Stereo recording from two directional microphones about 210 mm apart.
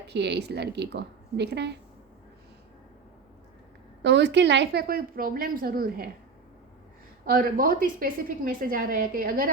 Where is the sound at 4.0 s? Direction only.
55° right (ahead or behind).